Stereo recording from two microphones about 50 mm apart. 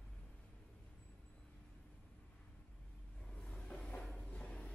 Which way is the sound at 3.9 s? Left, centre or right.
Centre.